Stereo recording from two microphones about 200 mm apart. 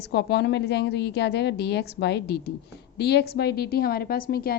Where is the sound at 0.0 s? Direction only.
55° left (ahead or behind).